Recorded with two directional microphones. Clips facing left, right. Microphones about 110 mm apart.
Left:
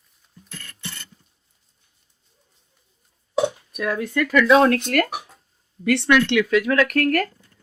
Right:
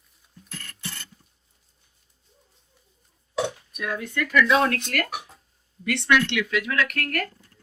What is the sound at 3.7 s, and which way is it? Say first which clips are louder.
Speech: left 6 dB; 45° left (ahead or behind).